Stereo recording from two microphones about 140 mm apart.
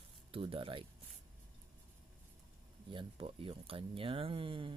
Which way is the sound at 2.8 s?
40° right (ahead or behind).